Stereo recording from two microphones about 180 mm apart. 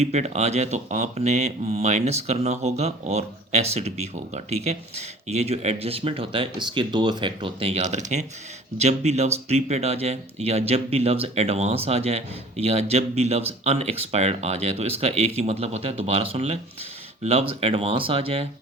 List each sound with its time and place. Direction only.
0.0 s speech: 35° right (ahead or behind)